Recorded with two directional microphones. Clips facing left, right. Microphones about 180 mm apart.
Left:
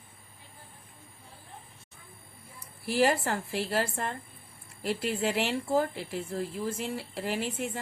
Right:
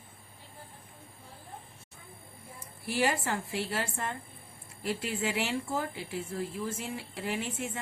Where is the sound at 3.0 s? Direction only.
35° left (ahead or behind).